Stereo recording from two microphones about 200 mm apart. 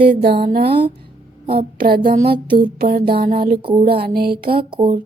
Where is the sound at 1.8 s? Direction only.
45° right (ahead or behind).